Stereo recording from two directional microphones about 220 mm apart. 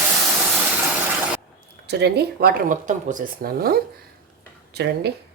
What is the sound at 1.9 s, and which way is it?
Speech, 50° right (ahead or behind).